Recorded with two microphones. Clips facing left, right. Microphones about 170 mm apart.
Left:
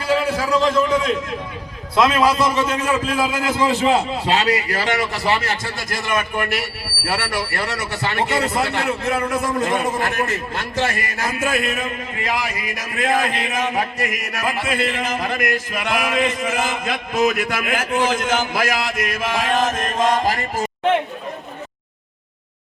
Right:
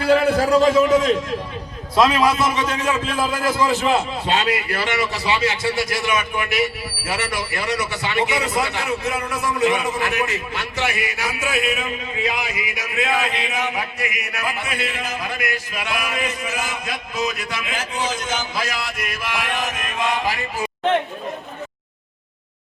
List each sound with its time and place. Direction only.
0.0 s a man's voice: 55° right (ahead or behind)
0.5 s a man's voice: 10° right (ahead or behind)
2.4 s a man's voice: centre (ahead or behind)
3.4 s a man's voice: 25° left (ahead or behind); by 20.7 s 45° left (ahead or behind)